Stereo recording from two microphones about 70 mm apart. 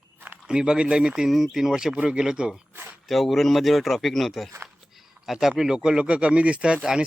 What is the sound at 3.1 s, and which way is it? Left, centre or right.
Speech, centre.